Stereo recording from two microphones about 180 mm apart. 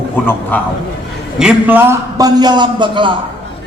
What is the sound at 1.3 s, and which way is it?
A man's voice, 5° right (ahead or behind).